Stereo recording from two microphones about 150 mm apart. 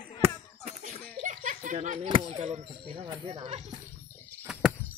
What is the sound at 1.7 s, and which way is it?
Chop, 45° right (ahead or behind).